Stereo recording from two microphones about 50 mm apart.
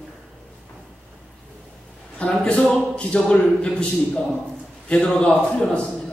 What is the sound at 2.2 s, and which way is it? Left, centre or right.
A man's voice, left.